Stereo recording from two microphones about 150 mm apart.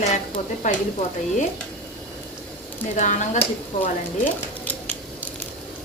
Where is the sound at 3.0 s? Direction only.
55° left (ahead or behind).